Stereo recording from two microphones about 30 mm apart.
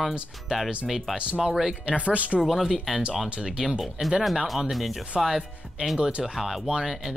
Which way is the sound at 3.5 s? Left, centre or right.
Centre.